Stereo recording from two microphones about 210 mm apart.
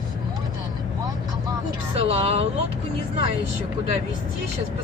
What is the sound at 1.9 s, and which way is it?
Speech, 30° right (ahead or behind).